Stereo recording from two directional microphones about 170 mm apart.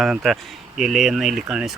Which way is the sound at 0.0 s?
Centre (ahead or behind).